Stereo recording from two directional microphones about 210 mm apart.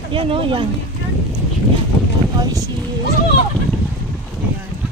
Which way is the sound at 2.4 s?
15° right (ahead or behind).